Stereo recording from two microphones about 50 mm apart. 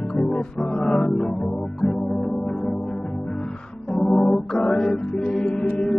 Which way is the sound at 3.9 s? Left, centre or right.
Centre.